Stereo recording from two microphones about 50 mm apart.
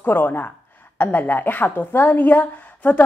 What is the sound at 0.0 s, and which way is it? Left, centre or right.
A woman's voice, left.